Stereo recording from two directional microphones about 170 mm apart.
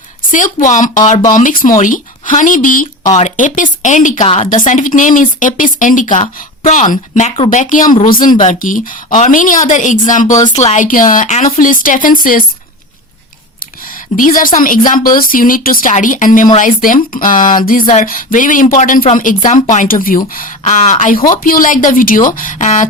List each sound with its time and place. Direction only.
0.3 s speech: 50° left (ahead or behind)
10.3 s speech: 25° left (ahead or behind)
10.6 s speech: 45° left (ahead or behind)
14.2 s speech: 55° left (ahead or behind)